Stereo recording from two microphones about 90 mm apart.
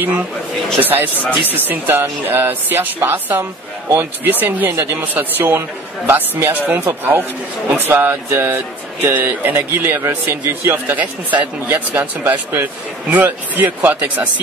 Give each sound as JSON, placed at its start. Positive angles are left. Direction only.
{"t": 0.7, "sound": "speech", "side_deg": -20}